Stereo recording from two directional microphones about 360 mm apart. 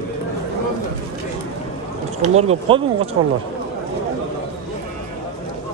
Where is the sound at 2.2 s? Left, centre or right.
Centre.